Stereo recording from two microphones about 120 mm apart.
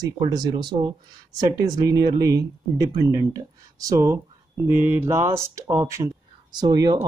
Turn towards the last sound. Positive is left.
turn(degrees=-35)  # may be behind; listen again after turning